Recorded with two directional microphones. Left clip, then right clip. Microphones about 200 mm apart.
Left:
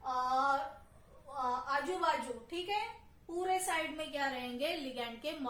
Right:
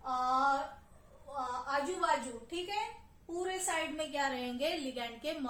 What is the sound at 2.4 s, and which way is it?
A woman's voice, 15° right (ahead or behind).